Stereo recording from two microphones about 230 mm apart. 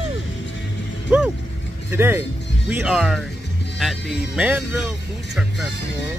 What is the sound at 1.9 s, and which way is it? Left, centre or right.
Speech, centre.